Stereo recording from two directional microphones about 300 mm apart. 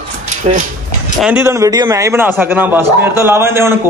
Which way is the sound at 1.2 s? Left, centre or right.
Centre.